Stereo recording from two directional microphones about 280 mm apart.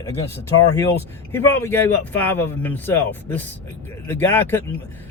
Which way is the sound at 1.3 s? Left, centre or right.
Centre.